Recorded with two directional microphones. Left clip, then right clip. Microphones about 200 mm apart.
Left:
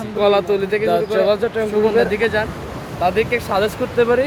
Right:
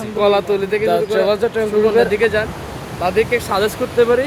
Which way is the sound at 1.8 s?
Centre (ahead or behind).